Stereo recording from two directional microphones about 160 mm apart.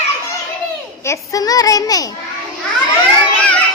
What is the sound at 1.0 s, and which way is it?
A child's voice, 20° left (ahead or behind).